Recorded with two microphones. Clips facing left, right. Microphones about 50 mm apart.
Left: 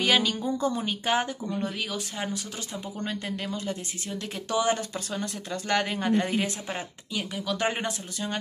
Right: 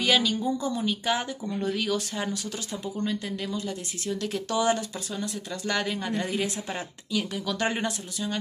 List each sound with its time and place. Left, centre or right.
0.0 s a woman's voice: left
1.6 s speech: centre
3.1 s a woman's voice: left
4.1 s speech: left
4.7 s a woman's voice: left
6.7 s speech: centre